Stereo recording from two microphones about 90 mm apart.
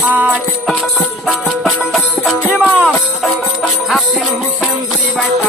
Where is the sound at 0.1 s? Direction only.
15° right (ahead or behind).